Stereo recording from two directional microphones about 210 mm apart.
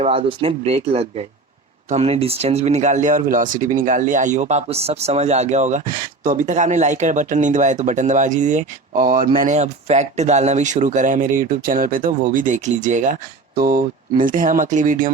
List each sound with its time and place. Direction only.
0.0 s speech: 25° right (ahead or behind)